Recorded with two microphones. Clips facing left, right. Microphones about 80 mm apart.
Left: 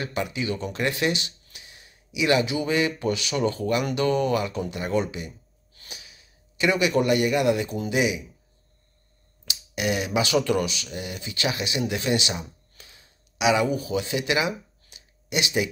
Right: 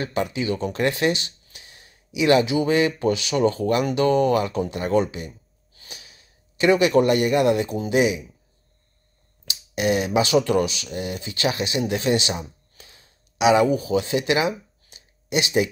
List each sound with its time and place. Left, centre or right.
0.0 s speech: right
9.5 s speech: right
14.9 s a sound: right